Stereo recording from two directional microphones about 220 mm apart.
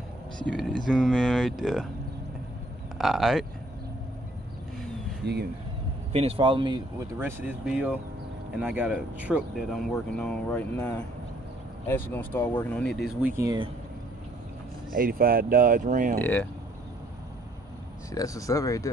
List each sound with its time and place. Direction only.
0.5 s speech: centre (ahead or behind)
3.0 s speech: centre (ahead or behind)
5.2 s speech: 50° right (ahead or behind)
6.1 s speech: 25° right (ahead or behind)
7.2 s speech: 10° right (ahead or behind)
13.4 s speech: 20° right (ahead or behind)
14.9 s speech: 40° right (ahead or behind)
16.2 s speech: 10° left (ahead or behind)
18.1 s speech: 15° left (ahead or behind)